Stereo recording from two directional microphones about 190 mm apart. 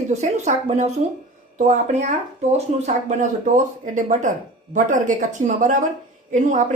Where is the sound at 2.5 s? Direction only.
35° right (ahead or behind).